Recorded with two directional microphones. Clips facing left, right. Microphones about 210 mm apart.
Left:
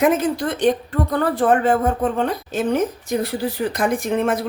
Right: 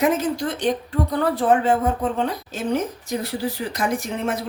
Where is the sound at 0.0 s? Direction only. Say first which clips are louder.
Left 3 dB; 55° left (ahead or behind).